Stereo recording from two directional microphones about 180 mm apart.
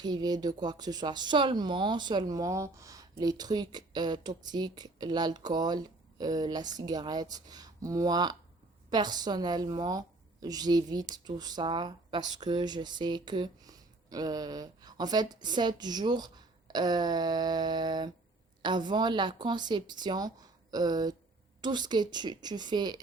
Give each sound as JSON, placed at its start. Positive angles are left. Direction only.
{"t": 0.0, "sound": "speech", "side_deg": -25}